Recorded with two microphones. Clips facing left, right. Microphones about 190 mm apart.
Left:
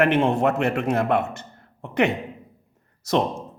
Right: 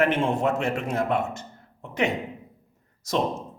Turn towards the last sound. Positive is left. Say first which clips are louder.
# left 4 dB
turn(degrees=60)  # may be behind; listen again after turning